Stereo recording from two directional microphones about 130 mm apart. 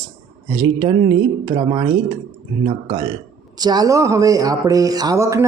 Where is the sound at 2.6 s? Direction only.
45° right (ahead or behind).